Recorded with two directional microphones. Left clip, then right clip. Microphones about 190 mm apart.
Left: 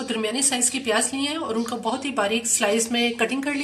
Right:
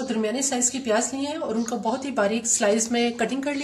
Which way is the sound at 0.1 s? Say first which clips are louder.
Left 2 dB; 40° right (ahead or behind).